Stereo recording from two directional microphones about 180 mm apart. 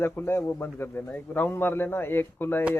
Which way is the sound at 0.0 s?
10° left (ahead or behind).